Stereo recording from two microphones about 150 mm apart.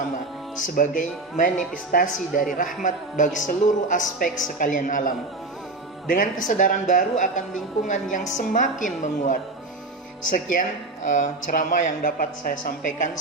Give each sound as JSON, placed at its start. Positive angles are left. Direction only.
{"t": 0.6, "sound": "speech", "side_deg": 60}